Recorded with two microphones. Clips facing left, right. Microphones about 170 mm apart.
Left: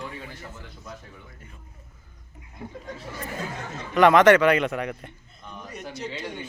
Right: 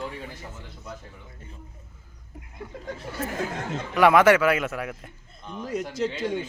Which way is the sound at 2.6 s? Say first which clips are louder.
Left 3 dB; 50° left (ahead or behind).